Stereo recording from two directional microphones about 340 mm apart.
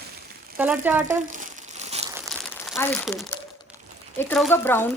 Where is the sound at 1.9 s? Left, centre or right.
Centre.